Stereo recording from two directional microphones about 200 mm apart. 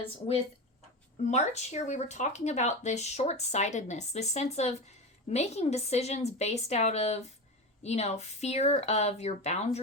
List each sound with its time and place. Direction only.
1.3 s speech: 35° left (ahead or behind)